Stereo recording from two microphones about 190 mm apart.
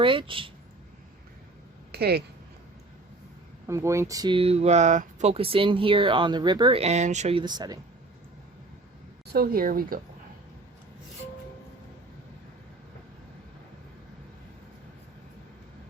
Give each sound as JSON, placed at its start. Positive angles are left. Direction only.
{"t": 0.0, "sound": "speech", "side_deg": -25}
{"t": 1.9, "sound": "speech", "side_deg": -55}
{"t": 3.7, "sound": "speech", "side_deg": -15}
{"t": 9.2, "sound": "speech", "side_deg": -55}